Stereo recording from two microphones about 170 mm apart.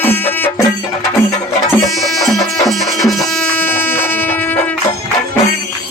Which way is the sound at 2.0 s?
Centre (ahead or behind).